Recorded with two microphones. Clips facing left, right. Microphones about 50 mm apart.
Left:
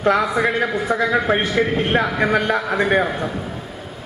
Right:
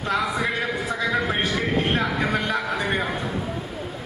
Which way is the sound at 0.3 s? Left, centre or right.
Left.